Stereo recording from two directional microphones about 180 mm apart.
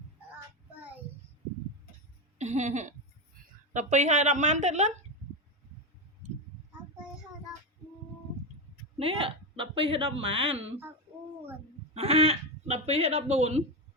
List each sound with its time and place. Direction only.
2.4 s a woman's voice: 40° right (ahead or behind)
9.0 s a woman's voice: 30° right (ahead or behind)
11.9 s speech: 35° right (ahead or behind)